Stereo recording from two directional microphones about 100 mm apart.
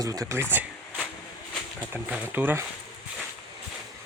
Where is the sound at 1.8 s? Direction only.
15° right (ahead or behind).